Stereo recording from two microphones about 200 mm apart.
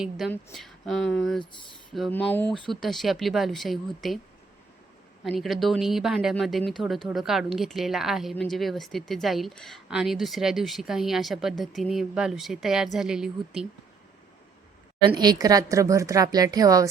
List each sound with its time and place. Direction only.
0.0 s speech: centre (ahead or behind)
5.4 s speech: centre (ahead or behind)
15.0 s a woman's voice: 20° right (ahead or behind)